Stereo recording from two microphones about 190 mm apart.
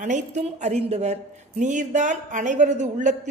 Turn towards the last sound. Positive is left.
turn(degrees=-40)  # may be behind; listen again after turning